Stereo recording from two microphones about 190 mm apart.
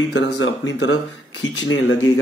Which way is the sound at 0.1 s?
80° left.